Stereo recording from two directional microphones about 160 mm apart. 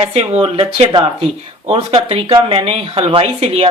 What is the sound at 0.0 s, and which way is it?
A man's voice, 35° right (ahead or behind).